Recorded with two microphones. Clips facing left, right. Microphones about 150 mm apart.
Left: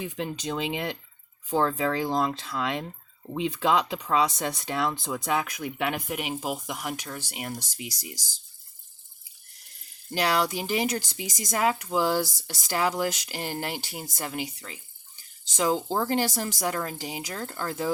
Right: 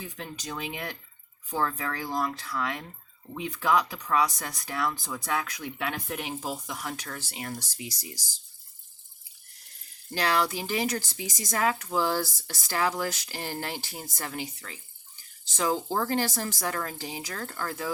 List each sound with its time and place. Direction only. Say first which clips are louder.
0.0 s speech: left 7 dB; 20° left (ahead or behind)
10.1 s speech: left 1 dB; 15° left (ahead or behind)